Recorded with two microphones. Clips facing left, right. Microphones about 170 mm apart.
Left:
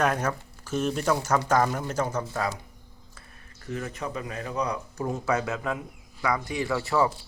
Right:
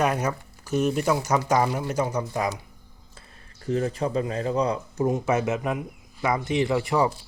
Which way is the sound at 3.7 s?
30° right (ahead or behind).